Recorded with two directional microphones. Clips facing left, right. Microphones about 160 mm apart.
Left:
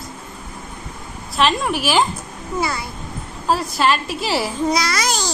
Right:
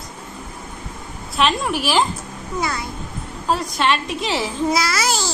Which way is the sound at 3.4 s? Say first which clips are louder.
Left 2 dB; 5° left (ahead or behind).